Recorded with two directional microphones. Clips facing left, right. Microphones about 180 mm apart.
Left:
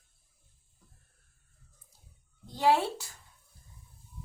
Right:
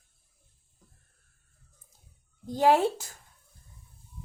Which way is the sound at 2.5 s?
45° right (ahead or behind).